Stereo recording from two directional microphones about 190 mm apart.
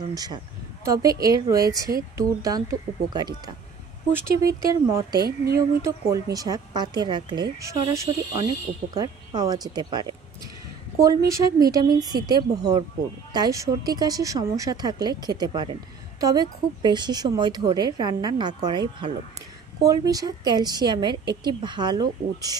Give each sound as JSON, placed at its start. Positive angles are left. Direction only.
{"t": 0.1, "sound": "a woman's voice", "side_deg": -20}
{"t": 4.6, "sound": "speech", "side_deg": -20}
{"t": 5.2, "sound": "speech", "side_deg": -55}
{"t": 5.9, "sound": "a woman's voice", "side_deg": -15}